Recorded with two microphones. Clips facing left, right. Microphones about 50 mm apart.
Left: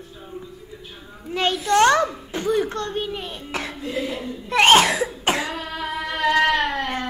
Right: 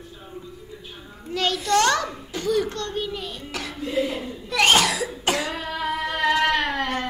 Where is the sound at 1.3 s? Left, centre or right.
Left.